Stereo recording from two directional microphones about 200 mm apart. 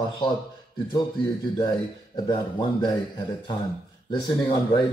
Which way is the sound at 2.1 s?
20° left (ahead or behind).